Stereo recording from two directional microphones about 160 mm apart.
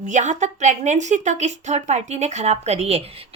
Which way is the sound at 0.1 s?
50° right (ahead or behind).